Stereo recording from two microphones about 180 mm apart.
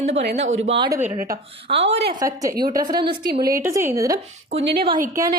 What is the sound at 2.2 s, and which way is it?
A woman's voice, 20° right (ahead or behind).